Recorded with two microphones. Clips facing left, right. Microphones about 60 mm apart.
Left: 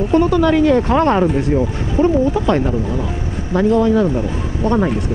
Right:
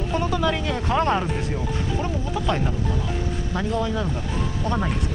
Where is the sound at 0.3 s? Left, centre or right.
Left.